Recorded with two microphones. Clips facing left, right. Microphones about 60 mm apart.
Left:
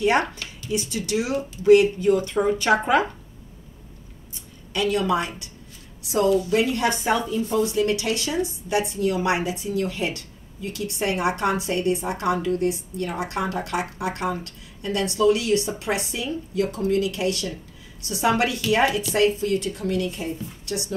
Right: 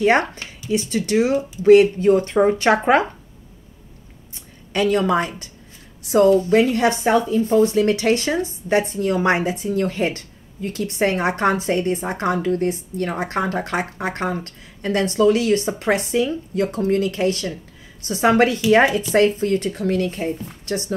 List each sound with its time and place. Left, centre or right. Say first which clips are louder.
0.0 s speech: right 4 dB; right
4.7 s a woman's voice: right 4 dB; right